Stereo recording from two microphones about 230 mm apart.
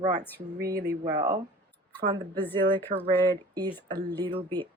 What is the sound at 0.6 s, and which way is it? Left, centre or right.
Speech, right.